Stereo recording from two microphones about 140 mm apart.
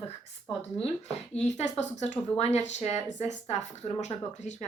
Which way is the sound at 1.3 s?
50° left (ahead or behind).